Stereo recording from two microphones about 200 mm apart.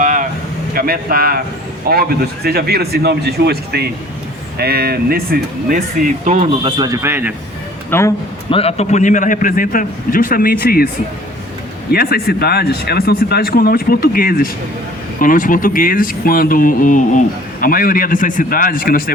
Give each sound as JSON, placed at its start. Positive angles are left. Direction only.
{"t": 0.0, "sound": "a sound", "side_deg": -40}
{"t": 0.7, "sound": "a man's voice", "side_deg": -45}
{"t": 6.2, "sound": "speech", "side_deg": -35}
{"t": 7.9, "sound": "speech", "side_deg": 10}
{"t": 8.4, "sound": "speech", "side_deg": 30}
{"t": 11.9, "sound": "speech", "side_deg": 50}